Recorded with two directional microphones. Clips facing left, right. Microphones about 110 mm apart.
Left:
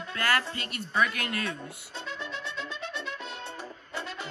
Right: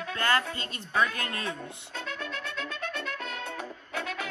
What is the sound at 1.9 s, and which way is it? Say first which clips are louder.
Music: right 1 dB; 55° right (ahead or behind).